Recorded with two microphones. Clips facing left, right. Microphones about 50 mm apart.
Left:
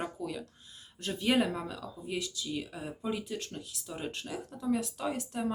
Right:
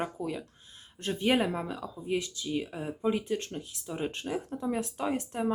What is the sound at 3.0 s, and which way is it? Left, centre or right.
Speech, right.